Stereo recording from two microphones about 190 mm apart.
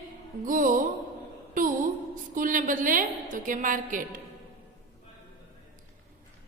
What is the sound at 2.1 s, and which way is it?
A woman's voice, 45° right (ahead or behind).